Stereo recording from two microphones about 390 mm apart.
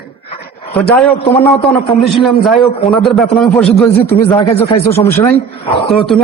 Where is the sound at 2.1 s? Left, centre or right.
Centre.